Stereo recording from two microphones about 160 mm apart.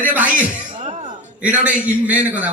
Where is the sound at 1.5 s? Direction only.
10° right (ahead or behind).